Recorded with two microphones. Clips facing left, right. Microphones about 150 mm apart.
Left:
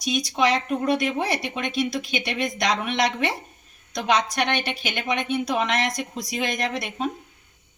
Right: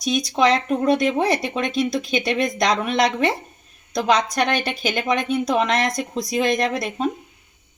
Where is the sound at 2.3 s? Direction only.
40° right (ahead or behind).